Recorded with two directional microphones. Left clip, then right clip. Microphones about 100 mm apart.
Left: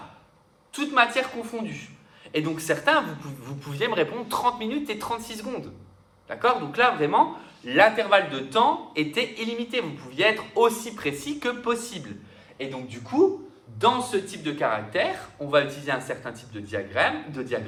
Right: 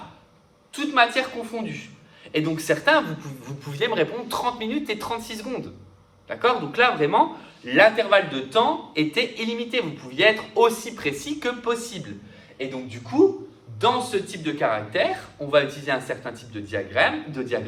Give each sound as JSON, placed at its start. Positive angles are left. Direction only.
{"t": 0.7, "sound": "a man's voice", "side_deg": 40}
{"t": 3.2, "sound": "a man's voice", "side_deg": 50}
{"t": 12.5, "sound": "a man's voice", "side_deg": 35}